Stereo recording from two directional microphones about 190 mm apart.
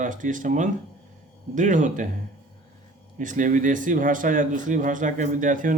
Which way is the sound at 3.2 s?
45° right (ahead or behind).